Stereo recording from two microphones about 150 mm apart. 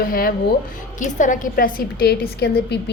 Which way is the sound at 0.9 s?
55° left (ahead or behind).